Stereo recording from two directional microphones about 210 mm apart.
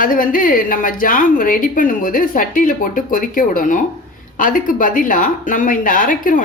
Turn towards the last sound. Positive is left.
turn(degrees=40)  # may be behind; listen again after turning